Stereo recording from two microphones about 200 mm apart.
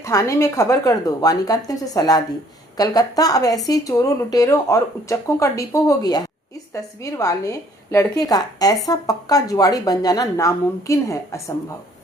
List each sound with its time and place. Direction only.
0.0 s a woman's voice: 15° left (ahead or behind)